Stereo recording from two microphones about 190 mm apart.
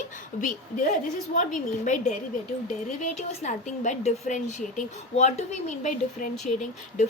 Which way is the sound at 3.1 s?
40° left (ahead or behind).